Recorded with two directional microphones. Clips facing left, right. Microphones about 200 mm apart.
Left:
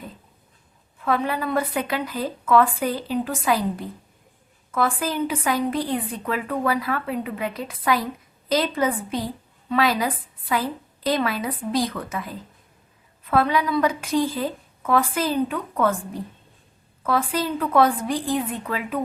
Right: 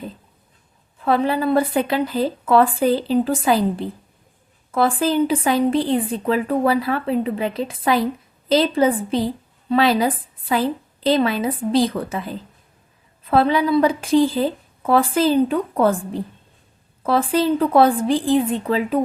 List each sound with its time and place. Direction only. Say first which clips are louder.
1.0 s a woman's voice: right 5 dB; 30° right (ahead or behind)